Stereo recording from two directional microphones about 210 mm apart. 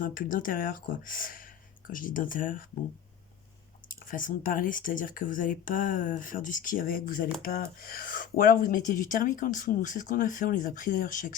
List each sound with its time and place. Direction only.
0.0 s speech: 40° left (ahead or behind)
4.0 s speech: 40° left (ahead or behind)